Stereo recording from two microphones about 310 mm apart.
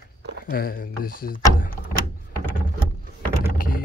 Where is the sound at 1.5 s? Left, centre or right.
Left.